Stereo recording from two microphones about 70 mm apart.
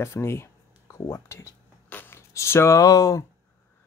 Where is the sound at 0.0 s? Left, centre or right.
Left.